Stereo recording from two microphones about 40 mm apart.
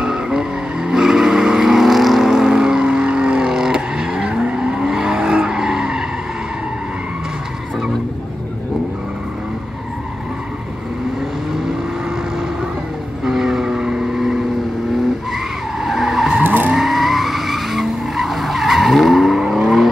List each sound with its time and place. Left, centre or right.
0.0 s vehicle: centre
13.2 s vehicle: centre
15.3 s skidding: centre
16.4 s vehicle: right
16.7 s vehicle: centre